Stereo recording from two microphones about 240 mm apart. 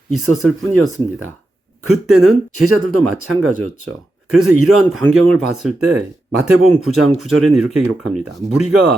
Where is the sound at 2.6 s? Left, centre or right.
Right.